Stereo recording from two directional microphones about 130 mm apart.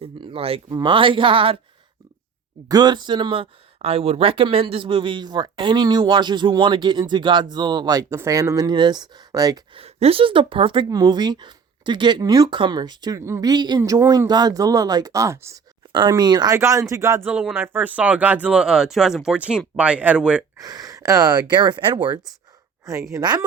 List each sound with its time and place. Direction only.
0.0 s a sound: 45° right (ahead or behind)
0.7 s speech: 35° right (ahead or behind)
2.6 s speech: 30° right (ahead or behind)
9.7 s a woman's voice: 50° right (ahead or behind)
10.8 s speech: 30° right (ahead or behind)
15.9 s speech: 40° right (ahead or behind)
16.6 s speech: 25° right (ahead or behind)
20.6 s speech: 30° right (ahead or behind)